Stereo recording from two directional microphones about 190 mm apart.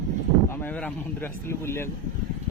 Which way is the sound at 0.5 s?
10° left (ahead or behind).